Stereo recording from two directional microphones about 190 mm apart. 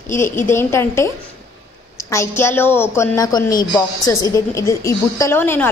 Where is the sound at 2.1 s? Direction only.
15° left (ahead or behind).